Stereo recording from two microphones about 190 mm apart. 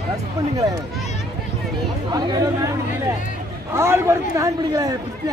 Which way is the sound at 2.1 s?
20° right (ahead or behind).